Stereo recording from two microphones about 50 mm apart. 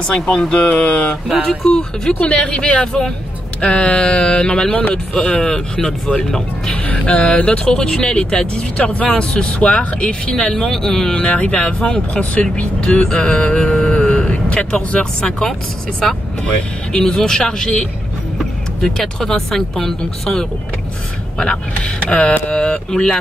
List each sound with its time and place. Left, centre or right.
0.4 s speech: centre
2.1 s speech: left
16.9 s speech: centre
18.8 s speech: centre
21.4 s speech: centre